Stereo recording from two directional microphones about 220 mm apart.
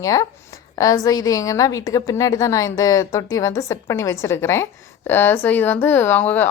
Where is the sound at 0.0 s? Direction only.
15° left (ahead or behind).